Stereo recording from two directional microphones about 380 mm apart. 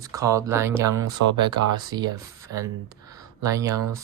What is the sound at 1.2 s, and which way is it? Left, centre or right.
Speech, right.